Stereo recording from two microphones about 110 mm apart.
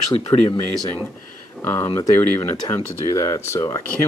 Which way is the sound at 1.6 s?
20° left (ahead or behind).